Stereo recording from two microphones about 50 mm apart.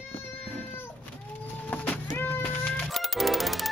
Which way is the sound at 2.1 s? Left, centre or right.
Left.